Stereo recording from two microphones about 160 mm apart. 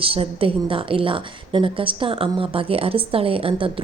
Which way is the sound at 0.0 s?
35° right (ahead or behind).